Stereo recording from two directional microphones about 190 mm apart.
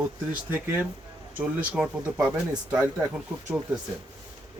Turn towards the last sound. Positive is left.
turn(degrees=-5)  # may be behind; listen again after turning